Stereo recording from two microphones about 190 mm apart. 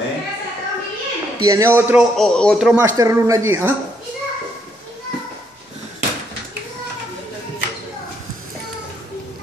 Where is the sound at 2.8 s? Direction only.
15° right (ahead or behind).